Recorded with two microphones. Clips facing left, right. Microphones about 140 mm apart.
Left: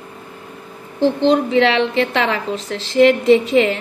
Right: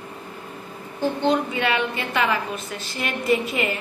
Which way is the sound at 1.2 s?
90° left.